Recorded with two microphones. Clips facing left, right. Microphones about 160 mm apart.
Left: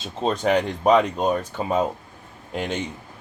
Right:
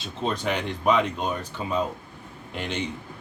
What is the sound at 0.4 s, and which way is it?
Speech, 40° left (ahead or behind).